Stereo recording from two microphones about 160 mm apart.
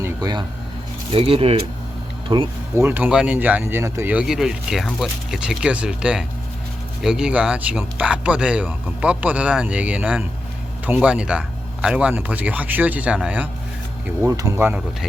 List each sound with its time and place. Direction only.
0.0 s a sound: 25° right (ahead or behind)
1.1 s speech: 35° right (ahead or behind)
2.7 s speech: 10° right (ahead or behind)
14.2 s speech: 20° right (ahead or behind)